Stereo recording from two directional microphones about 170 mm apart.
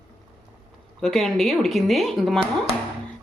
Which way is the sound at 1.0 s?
Centre (ahead or behind).